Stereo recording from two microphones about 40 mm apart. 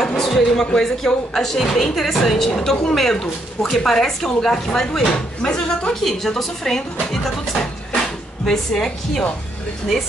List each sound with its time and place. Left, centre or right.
0.0 s music: centre
0.7 s a woman's voice: centre
5.4 s speech: left
6.0 s a woman's voice: centre
8.5 s a woman's voice: centre